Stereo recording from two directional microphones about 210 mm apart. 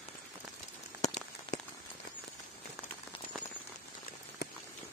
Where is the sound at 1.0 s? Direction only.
35° left (ahead or behind).